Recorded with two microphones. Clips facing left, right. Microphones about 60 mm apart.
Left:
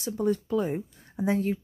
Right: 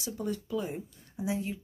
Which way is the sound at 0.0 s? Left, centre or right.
Left.